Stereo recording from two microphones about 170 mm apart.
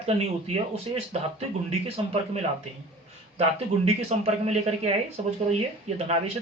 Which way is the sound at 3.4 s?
40° right (ahead or behind).